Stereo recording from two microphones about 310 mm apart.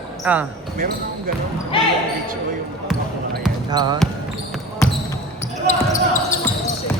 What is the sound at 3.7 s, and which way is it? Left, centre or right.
Speech, centre.